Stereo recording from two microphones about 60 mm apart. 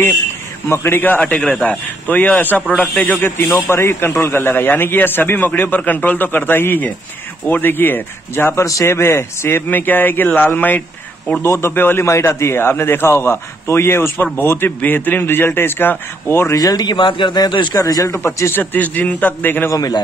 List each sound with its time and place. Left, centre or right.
0.7 s a man's voice: left
8.5 s a man's voice: left
9.7 s a man's voice: left
11.4 s a man's voice: left
11.7 s a man's voice: left
12.1 s a man's voice: left
14.8 s a man's voice: left
16.5 s a man's voice: left
18.1 s a man's voice: left
18.5 s a man's voice: left